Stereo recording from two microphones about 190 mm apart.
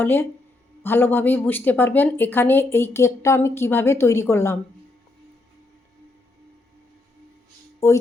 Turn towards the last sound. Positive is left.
turn(degrees=15)  # may be behind; listen again after turning